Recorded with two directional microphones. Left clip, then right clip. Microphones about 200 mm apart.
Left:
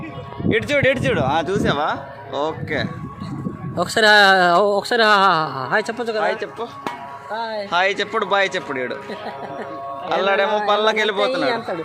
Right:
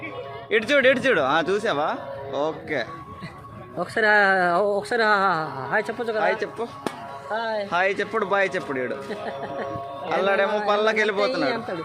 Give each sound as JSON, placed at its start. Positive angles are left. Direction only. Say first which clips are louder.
{"t": 0.4, "sound": "speech", "louder": "left 1 dB", "side_deg": -5}
{"t": 3.8, "sound": "speech", "louder": "left 6 dB", "side_deg": 55}
{"t": 6.2, "sound": "speech", "louder": "left 1 dB", "side_deg": -15}
{"t": 7.3, "sound": "speech", "louder": "left 1 dB", "side_deg": 55}
{"t": 7.7, "sound": "speech", "louder": "left 6 dB", "side_deg": 0}
{"t": 10.1, "sound": "speech", "louder": "left 3 dB", "side_deg": 0}
{"t": 11.4, "sound": "a man's voice", "louder": "left 4 dB", "side_deg": 20}